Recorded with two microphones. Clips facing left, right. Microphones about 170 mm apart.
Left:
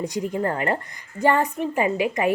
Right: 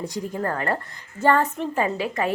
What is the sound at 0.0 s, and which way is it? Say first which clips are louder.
A woman's voice: left 3 dB; 20° left (ahead or behind).